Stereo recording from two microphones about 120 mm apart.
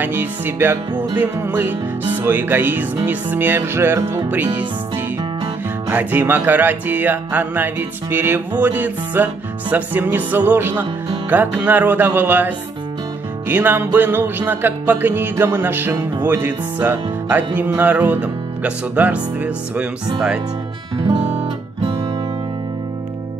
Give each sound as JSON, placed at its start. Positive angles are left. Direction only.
{"t": 0.0, "sound": "music", "side_deg": -15}
{"t": 5.9, "sound": "music", "side_deg": -15}